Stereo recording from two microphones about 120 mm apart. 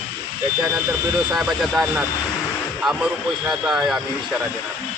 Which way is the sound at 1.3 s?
Centre (ahead or behind).